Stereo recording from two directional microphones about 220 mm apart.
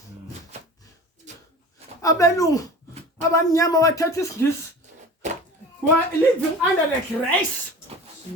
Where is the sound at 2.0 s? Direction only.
15° left (ahead or behind).